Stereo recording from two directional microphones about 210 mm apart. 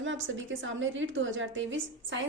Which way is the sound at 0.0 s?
65° right (ahead or behind).